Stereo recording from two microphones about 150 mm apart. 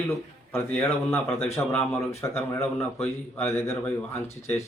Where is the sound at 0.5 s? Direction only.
15° left (ahead or behind).